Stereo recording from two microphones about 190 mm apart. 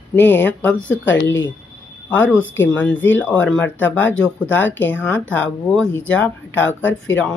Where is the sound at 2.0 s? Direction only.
10° left (ahead or behind).